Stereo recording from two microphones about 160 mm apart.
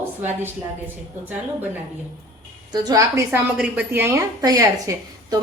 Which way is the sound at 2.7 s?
25° right (ahead or behind).